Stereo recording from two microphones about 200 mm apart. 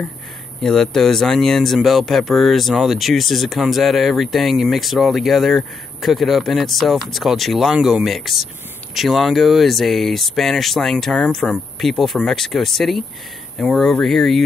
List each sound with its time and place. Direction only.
0.6 s speech: centre (ahead or behind)